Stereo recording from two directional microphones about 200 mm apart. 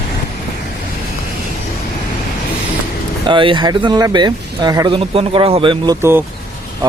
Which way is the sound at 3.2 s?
25° right (ahead or behind).